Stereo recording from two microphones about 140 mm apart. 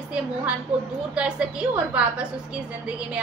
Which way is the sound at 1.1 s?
10° right (ahead or behind).